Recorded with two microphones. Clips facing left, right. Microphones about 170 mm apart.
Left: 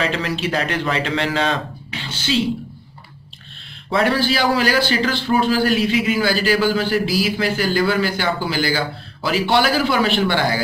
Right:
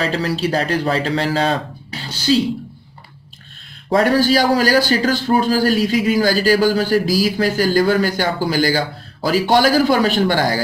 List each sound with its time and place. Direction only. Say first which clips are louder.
0.0 s a man's voice: right 2 dB; 40° right (ahead or behind)
3.9 s a man's voice: right 4 dB; 45° right (ahead or behind)